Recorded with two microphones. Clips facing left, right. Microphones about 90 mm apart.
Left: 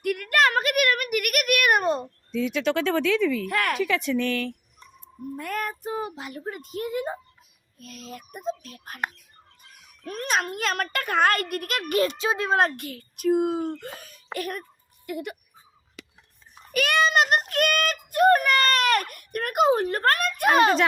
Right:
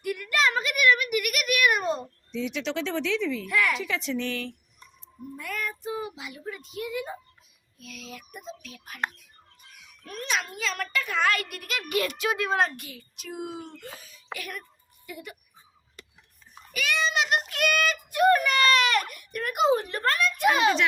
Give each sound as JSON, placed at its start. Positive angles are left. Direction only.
{"t": 0.0, "sound": "a sound", "side_deg": 60}
{"t": 5.4, "sound": "a child's voice", "side_deg": 45}
{"t": 9.7, "sound": "a sound", "side_deg": 45}
{"t": 10.4, "sound": "a child's voice", "side_deg": 60}
{"t": 11.9, "sound": "a child's voice", "side_deg": 30}
{"t": 12.5, "sound": "a child's voice", "side_deg": 50}
{"t": 14.3, "sound": "a child's voice", "side_deg": 45}
{"t": 15.0, "sound": "a child's voice", "side_deg": 60}
{"t": 16.0, "sound": "a sound", "side_deg": 90}
{"t": 16.7, "sound": "a child's voice", "side_deg": 55}